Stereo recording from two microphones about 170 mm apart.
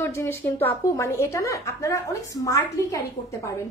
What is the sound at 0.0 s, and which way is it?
A woman's voice, 15° left (ahead or behind).